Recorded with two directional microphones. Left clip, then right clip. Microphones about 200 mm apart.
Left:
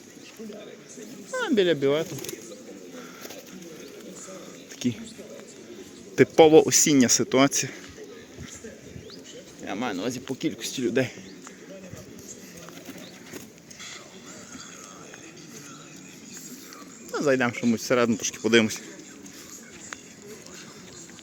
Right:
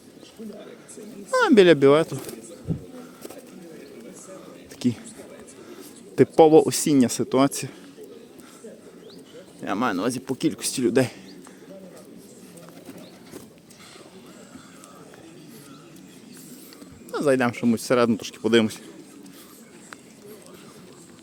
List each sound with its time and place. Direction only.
1.3 s speech: 40° right (ahead or behind)
4.8 s speech: 25° right (ahead or behind)
6.1 s speech: 15° right (ahead or behind)
9.6 s speech: 40° right (ahead or behind)
17.1 s speech: 15° right (ahead or behind)